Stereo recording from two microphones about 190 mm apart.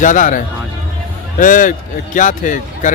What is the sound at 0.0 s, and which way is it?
Speech, 45° left (ahead or behind).